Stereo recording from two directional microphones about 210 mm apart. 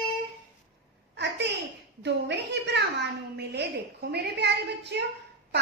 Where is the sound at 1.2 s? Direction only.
55° right (ahead or behind).